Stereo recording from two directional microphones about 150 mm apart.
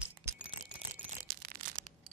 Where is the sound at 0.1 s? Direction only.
20° right (ahead or behind).